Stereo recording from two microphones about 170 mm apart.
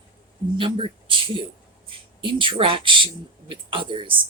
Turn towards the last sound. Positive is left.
turn(degrees=-30)  # may be behind; listen again after turning